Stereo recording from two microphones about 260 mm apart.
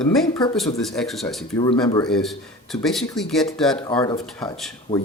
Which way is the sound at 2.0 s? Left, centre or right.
Centre.